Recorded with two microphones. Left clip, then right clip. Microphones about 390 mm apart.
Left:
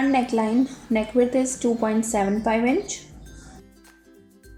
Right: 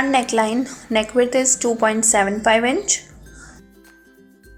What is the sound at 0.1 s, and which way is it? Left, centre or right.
A woman's voice, right.